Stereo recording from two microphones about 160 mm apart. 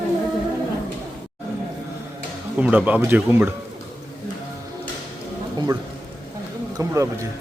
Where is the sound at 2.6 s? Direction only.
10° right (ahead or behind).